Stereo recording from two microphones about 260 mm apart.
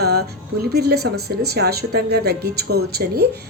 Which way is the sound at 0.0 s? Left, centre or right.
Right.